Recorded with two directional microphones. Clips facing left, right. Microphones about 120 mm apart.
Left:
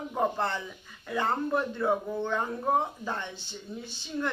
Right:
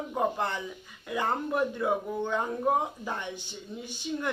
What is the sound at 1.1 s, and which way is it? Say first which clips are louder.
Speech: left 1 dB; 10° right (ahead or behind).